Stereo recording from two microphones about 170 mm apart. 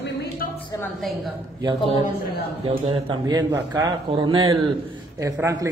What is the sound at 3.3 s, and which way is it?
A man's voice, 20° right (ahead or behind).